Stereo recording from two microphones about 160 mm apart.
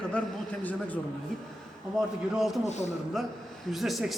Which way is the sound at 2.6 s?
45° left (ahead or behind).